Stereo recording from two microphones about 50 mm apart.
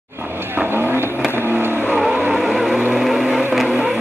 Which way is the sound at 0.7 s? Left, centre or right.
Right.